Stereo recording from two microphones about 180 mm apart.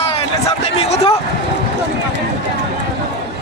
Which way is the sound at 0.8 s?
35° left (ahead or behind).